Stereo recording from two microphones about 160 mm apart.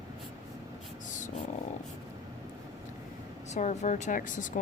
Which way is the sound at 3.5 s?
50° left (ahead or behind).